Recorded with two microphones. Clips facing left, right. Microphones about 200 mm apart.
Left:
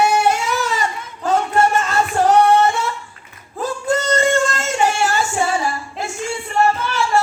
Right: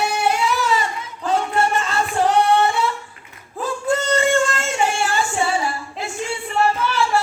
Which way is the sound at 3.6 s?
40° left (ahead or behind).